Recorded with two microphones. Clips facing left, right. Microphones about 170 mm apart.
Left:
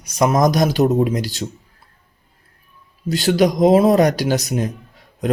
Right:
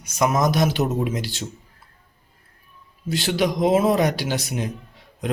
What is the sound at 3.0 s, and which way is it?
A man's voice, 40° left (ahead or behind).